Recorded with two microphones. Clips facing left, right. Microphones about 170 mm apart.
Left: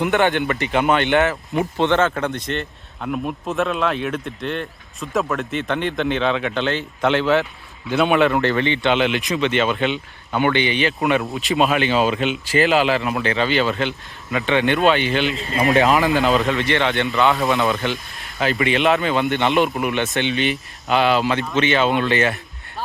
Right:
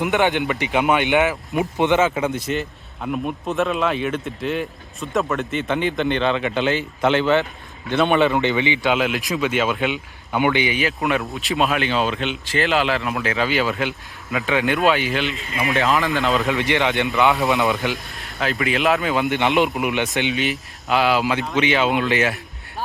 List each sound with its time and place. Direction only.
0.0 s speech: 15° right (ahead or behind)
15.3 s speech: 40° left (ahead or behind)
15.7 s speech: 20° left (ahead or behind)
16.1 s speech: centre (ahead or behind)
16.6 s speech: 15° right (ahead or behind)
17.9 s speech: centre (ahead or behind)
19.5 s speech: 20° right (ahead or behind)